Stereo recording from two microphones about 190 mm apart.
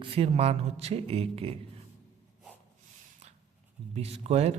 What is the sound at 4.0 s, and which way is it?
Speech, 35° right (ahead or behind).